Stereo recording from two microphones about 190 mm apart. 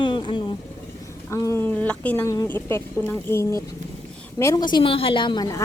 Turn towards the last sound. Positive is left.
turn(degrees=20)  # may be behind; listen again after turning